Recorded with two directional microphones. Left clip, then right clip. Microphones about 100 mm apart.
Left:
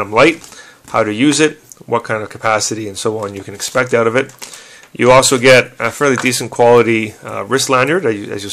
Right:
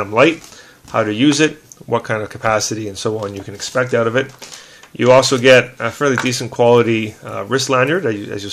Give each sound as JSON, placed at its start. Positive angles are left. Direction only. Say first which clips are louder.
{"t": 0.0, "sound": "speech", "louder": "left 2 dB", "side_deg": 35}